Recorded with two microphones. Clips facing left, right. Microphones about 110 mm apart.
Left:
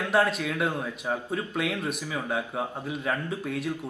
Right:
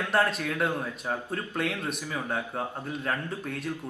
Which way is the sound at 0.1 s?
5° left (ahead or behind).